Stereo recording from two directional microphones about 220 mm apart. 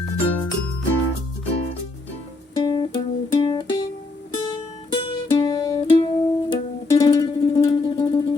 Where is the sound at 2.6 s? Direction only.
20° left (ahead or behind).